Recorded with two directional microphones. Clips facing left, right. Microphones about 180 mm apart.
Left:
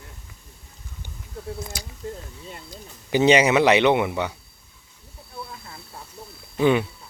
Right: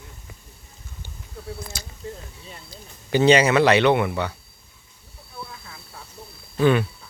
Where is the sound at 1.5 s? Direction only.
15° left (ahead or behind).